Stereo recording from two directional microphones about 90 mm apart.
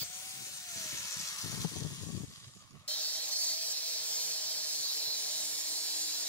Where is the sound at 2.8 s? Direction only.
15° left (ahead or behind).